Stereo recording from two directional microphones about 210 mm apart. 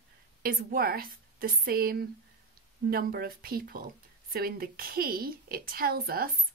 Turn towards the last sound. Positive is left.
turn(degrees=-45)  # may be behind; listen again after turning